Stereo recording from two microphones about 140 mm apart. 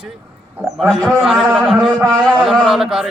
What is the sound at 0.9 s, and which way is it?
A man's voice, centre (ahead or behind).